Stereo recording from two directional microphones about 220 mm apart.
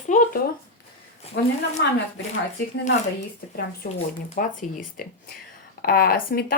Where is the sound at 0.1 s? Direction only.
35° left (ahead or behind).